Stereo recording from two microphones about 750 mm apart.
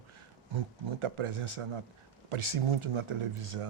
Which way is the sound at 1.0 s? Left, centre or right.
Right.